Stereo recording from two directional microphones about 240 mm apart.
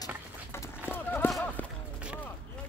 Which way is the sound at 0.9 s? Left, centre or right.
Centre.